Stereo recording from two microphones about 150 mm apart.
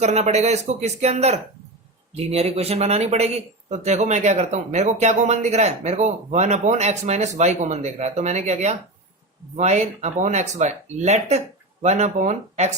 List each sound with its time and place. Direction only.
0.0 s speech: 45° right (ahead or behind)